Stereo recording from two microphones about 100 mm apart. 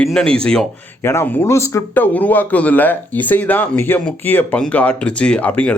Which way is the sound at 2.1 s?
15° left (ahead or behind).